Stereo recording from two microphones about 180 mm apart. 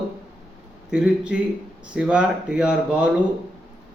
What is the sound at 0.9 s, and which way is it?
A man's voice, 5° right (ahead or behind).